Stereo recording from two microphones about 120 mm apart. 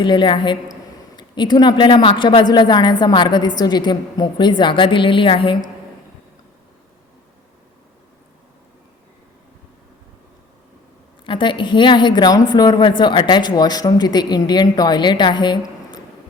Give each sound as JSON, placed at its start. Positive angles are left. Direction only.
{"t": 0.0, "sound": "a man's voice", "side_deg": 40}
{"t": 11.3, "sound": "a man's voice", "side_deg": 45}